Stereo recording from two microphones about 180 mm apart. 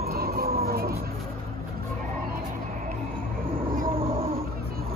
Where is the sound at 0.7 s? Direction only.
60° right (ahead or behind).